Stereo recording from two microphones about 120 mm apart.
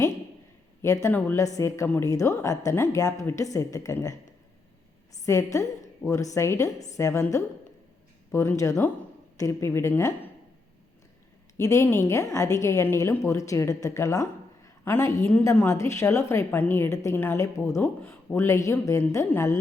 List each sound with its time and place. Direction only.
1.0 s a woman's voice: 20° left (ahead or behind)
5.2 s a woman's voice: 25° left (ahead or behind)
11.5 s a woman's voice: 25° left (ahead or behind)